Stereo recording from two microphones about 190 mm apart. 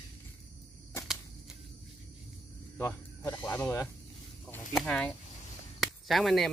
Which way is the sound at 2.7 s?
15° left (ahead or behind).